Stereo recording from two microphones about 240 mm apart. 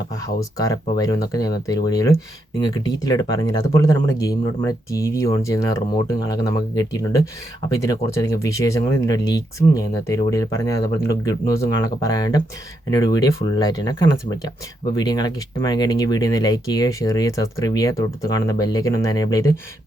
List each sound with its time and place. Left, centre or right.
0.1 s speech: centre